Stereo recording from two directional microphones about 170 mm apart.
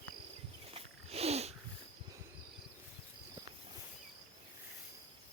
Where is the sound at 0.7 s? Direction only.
35° right (ahead or behind).